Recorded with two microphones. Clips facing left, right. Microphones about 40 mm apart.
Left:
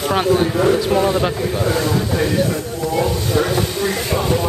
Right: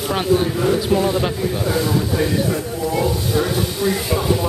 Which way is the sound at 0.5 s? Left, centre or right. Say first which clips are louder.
Left 2 dB; left.